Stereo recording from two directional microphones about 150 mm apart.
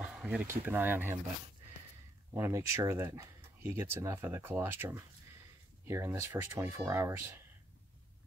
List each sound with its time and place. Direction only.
0.2 s speech: 10° right (ahead or behind)
2.3 s speech: 20° right (ahead or behind)